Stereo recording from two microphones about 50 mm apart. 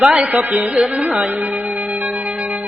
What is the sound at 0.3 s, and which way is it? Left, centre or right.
Mantra, right.